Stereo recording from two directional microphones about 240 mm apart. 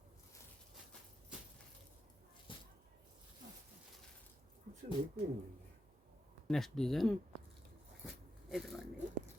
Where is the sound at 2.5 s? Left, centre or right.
Left.